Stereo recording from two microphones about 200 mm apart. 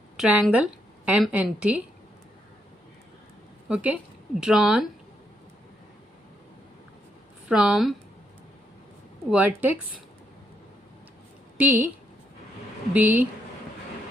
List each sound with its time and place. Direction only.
0.2 s a woman's voice: 5° right (ahead or behind)
3.7 s speech: 5° right (ahead or behind)
7.4 s speech: 5° right (ahead or behind)
9.3 s a woman's voice: 10° right (ahead or behind)
11.5 s a woman's voice: 10° right (ahead or behind)
12.9 s a woman's voice: 10° right (ahead or behind)